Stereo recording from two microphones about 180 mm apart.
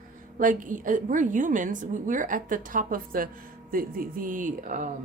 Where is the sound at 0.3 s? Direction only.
45° right (ahead or behind).